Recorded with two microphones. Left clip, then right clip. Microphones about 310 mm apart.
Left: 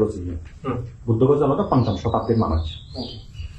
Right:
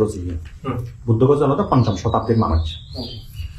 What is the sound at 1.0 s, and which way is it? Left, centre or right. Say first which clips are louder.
Speech: right 2 dB; left.